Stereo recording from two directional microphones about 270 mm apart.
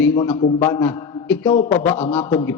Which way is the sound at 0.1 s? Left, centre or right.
Centre.